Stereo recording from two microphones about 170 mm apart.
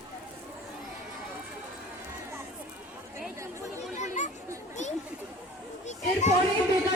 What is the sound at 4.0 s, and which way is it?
Chatter, 45° left (ahead or behind).